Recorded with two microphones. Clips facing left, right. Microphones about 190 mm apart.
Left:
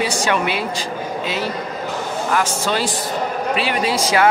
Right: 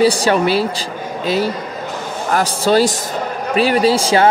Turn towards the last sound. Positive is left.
turn(degrees=-30)  # may be behind; listen again after turning